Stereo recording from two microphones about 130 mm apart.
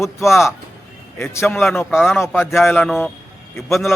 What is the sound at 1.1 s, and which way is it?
A man's voice, 20° left (ahead or behind).